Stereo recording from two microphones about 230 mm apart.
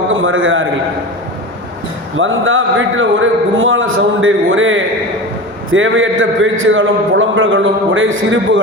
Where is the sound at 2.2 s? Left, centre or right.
Right.